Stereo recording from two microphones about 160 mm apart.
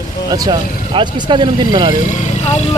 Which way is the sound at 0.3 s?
25° right (ahead or behind).